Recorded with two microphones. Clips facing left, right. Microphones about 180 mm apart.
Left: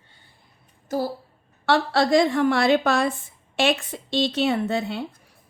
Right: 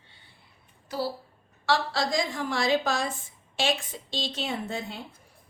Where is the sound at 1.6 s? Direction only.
60° left (ahead or behind).